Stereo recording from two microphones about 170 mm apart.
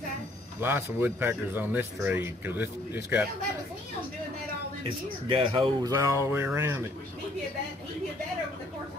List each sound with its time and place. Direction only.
0.6 s speech: 10° right (ahead or behind)
4.8 s speech: 30° right (ahead or behind); by 6.9 s 15° right (ahead or behind)